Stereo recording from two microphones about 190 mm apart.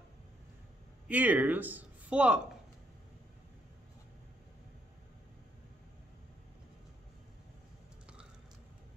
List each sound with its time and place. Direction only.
1.0 s speech: 10° right (ahead or behind)